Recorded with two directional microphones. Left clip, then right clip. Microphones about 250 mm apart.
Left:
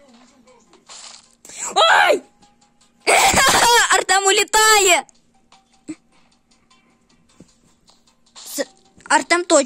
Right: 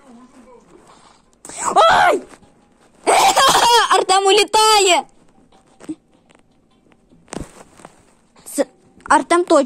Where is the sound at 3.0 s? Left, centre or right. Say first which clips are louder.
Right 2 dB; left.